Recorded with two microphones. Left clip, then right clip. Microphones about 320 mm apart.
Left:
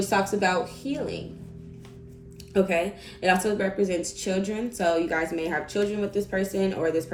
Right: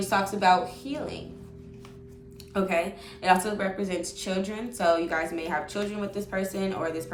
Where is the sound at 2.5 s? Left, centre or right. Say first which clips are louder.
Left 3 dB; right.